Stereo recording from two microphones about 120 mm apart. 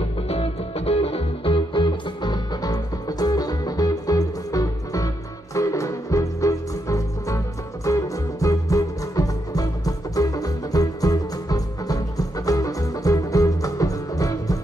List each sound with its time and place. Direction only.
0.3 s music: 55° left (ahead or behind); by 14.6 s 30° left (ahead or behind)